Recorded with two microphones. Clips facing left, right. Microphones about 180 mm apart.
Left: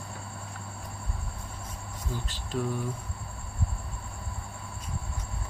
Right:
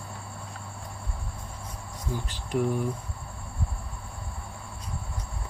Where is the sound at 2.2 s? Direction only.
15° right (ahead or behind).